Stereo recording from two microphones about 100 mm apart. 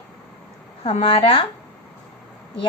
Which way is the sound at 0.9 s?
70° left (ahead or behind).